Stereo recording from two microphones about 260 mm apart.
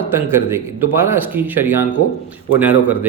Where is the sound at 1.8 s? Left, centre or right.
Left.